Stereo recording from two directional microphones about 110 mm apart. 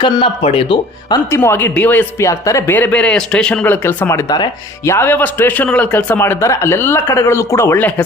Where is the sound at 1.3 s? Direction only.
20° left (ahead or behind).